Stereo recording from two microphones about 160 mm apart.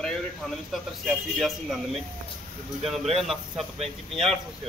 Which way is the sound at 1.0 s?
Centre (ahead or behind).